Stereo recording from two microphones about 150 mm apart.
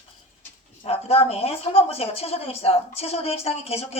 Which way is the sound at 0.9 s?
40° left (ahead or behind).